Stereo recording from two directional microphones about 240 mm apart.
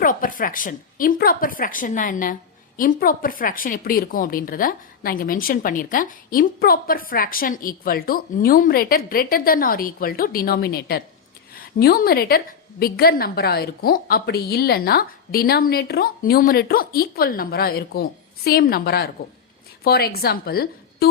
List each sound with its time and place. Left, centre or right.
0.0 s a woman's voice: left